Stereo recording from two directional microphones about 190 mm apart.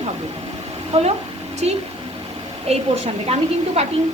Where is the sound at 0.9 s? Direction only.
35° right (ahead or behind).